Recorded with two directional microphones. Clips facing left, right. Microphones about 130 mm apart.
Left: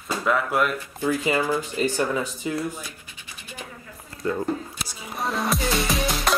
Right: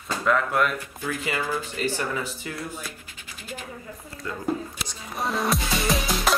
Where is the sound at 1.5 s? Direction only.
15° left (ahead or behind).